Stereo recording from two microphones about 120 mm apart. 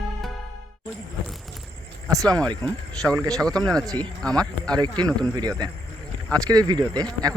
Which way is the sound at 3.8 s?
35° right (ahead or behind).